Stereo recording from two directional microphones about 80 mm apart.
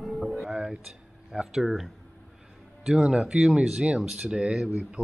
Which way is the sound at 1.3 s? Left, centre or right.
Centre.